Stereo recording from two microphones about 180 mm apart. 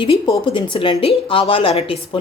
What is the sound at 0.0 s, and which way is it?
A woman's voice, 25° left (ahead or behind).